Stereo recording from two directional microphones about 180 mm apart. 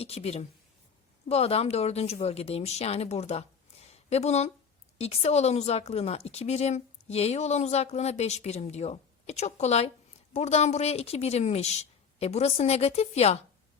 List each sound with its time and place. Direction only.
0.0 s speech: 35° left (ahead or behind)